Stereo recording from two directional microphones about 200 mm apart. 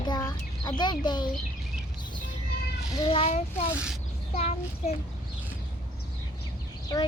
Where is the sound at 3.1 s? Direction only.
30° left (ahead or behind).